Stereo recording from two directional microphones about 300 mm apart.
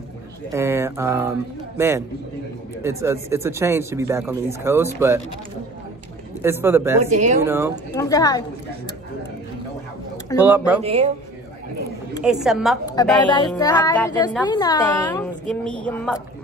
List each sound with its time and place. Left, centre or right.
0.5 s speech: centre
6.4 s speech: centre
7.0 s speech: right
7.4 s speech: centre
7.9 s a woman's voice: centre
10.4 s a woman's voice: centre
10.8 s speech: right
12.2 s a woman's voice: centre
13.0 s a woman's voice: centre